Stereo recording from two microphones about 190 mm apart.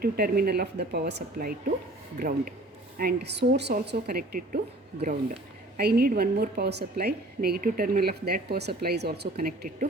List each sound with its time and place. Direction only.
0.0 s a woman's voice: 55° right (ahead or behind)
4.9 s speech: 35° right (ahead or behind)
5.7 s a woman's voice: 55° right (ahead or behind)